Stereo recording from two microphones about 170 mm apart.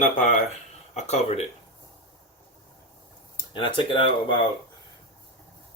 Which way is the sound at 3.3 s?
30° left (ahead or behind).